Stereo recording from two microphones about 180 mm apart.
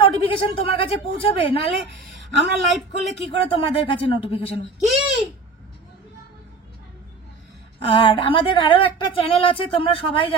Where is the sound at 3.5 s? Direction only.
30° left (ahead or behind).